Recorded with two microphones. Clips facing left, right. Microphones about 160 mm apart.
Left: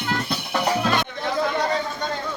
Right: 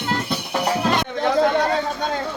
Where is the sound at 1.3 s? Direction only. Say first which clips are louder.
Right 4 dB; 65° right (ahead or behind).